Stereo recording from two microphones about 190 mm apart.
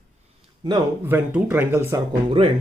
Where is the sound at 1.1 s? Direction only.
10° right (ahead or behind).